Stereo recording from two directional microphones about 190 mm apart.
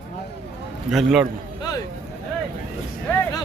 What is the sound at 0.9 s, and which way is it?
Speech, centre (ahead or behind).